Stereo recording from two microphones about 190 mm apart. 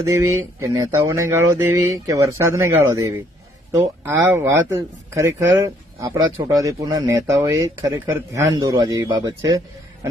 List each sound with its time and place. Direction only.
0.0 s speech: 15° right (ahead or behind)
4.2 s speech: 10° right (ahead or behind)